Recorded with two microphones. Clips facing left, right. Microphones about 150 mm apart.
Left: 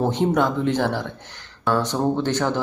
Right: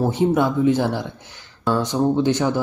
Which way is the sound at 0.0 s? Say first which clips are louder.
Right 2 dB; 10° right (ahead or behind).